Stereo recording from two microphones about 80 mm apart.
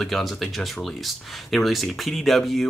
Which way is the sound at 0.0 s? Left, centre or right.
Centre.